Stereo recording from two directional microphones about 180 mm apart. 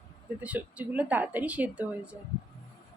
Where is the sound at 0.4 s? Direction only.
10° right (ahead or behind).